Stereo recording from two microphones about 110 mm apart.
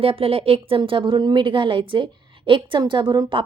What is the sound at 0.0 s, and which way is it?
A woman's voice, 60° right (ahead or behind).